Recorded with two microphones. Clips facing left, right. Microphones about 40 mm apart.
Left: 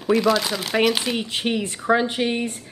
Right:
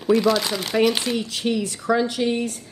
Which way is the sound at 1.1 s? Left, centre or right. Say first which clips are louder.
Even; left.